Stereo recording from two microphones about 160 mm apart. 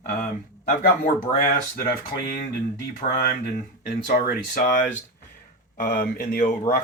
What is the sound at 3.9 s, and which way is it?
Speech, 70° left (ahead or behind).